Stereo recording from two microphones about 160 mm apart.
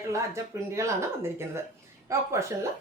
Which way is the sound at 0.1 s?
20° right (ahead or behind).